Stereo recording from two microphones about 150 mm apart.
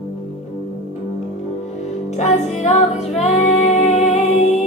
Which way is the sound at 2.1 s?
50° left (ahead or behind).